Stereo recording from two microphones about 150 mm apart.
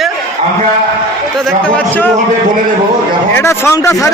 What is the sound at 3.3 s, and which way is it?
Speech, 15° left (ahead or behind).